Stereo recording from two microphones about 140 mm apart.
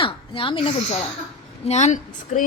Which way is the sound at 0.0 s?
40° left (ahead or behind).